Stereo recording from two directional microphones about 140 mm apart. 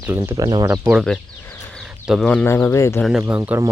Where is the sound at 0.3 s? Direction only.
30° right (ahead or behind).